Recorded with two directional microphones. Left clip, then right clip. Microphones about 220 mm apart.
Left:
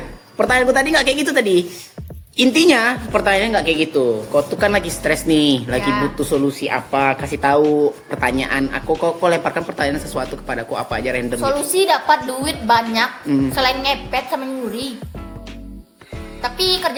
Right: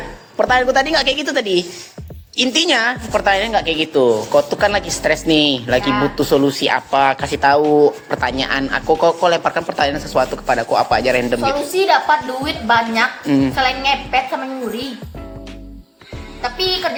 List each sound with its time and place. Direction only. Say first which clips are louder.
0.3 s speech: right 1 dB; centre (ahead or behind)
11.8 s a woman's voice: right 1 dB; 35° left (ahead or behind)
13.2 s speech: right 3 dB; centre (ahead or behind)
13.6 s a woman's voice: right 1 dB; 35° left (ahead or behind)
16.4 s a woman's voice: even; 35° left (ahead or behind)